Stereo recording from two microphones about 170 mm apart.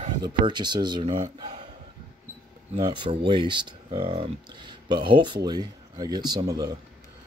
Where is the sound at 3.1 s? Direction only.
25° right (ahead or behind).